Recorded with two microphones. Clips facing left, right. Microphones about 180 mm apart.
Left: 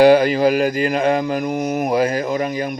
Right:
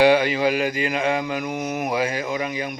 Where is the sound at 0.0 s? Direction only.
40° left (ahead or behind).